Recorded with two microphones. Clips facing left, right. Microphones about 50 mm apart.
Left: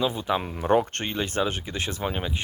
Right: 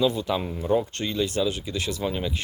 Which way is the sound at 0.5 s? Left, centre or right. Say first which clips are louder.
Left 4 dB; left.